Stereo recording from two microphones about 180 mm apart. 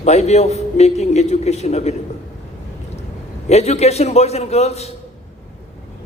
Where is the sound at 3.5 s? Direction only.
35° left (ahead or behind).